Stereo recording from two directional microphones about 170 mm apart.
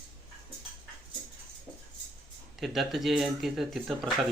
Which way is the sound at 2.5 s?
Centre (ahead or behind).